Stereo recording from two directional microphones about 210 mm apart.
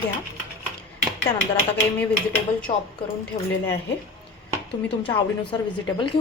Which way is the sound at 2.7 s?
20° left (ahead or behind).